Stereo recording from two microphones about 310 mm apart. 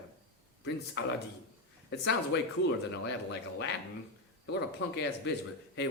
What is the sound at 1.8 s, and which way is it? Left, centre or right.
Speech, left.